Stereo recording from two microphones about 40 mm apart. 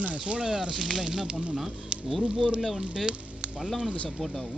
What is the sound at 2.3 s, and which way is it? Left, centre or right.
Speech, right.